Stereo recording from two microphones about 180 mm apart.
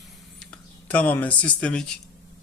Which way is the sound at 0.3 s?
5° left (ahead or behind).